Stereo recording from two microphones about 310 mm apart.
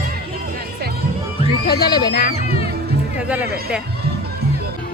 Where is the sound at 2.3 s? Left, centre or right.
Centre.